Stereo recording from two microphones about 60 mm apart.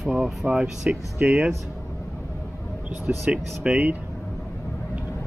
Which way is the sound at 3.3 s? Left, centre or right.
Centre.